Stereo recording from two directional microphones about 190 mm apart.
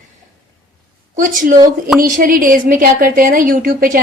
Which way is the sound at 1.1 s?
45° right (ahead or behind).